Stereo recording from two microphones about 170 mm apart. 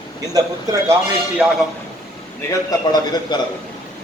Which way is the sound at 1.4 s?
Centre (ahead or behind).